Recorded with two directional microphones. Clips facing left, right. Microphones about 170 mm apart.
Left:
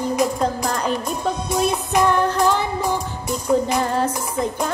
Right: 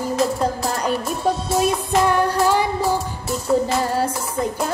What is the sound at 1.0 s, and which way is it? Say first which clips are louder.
Music: right 2 dB; 15° left (ahead or behind).